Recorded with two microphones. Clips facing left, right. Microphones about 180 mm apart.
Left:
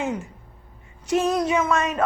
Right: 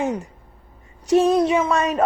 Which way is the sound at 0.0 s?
40° right (ahead or behind).